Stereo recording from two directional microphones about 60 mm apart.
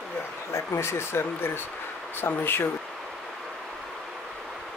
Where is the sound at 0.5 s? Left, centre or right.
Left.